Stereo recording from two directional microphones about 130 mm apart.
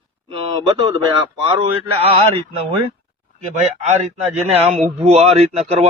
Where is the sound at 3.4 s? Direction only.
60° right (ahead or behind).